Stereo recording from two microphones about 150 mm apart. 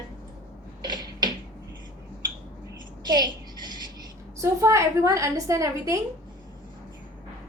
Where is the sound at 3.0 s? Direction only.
30° right (ahead or behind).